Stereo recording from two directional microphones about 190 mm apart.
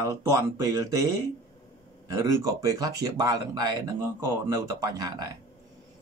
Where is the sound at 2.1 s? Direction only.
15° right (ahead or behind).